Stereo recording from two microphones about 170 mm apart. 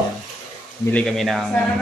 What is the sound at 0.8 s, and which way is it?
Speech, 5° left (ahead or behind).